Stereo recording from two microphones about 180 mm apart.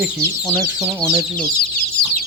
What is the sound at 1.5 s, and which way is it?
Chicken, 55° left (ahead or behind).